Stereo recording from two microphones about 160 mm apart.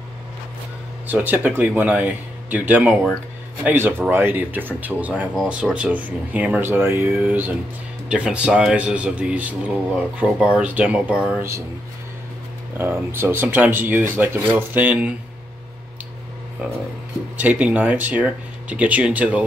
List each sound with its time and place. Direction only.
1.0 s speech: 10° right (ahead or behind)
12.7 s speech: 15° right (ahead or behind)
17.4 s speech: 10° right (ahead or behind)